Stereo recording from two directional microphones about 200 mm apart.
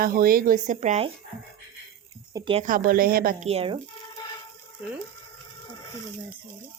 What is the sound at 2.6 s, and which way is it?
Speech, 45° right (ahead or behind).